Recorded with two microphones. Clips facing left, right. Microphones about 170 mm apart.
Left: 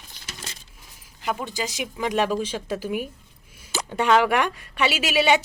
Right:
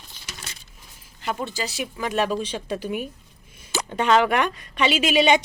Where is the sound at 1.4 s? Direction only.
15° left (ahead or behind).